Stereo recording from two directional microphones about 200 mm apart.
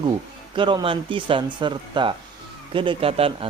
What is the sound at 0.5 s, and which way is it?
Speech, 25° right (ahead or behind).